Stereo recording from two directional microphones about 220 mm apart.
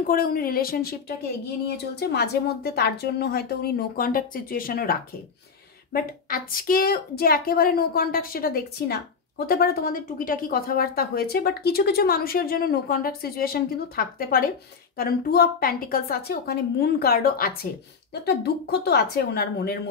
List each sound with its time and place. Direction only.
0.0 s a woman's voice: 40° left (ahead or behind)
5.9 s speech: 40° left (ahead or behind)